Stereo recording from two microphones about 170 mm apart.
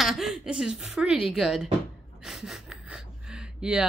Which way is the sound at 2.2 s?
Centre (ahead or behind).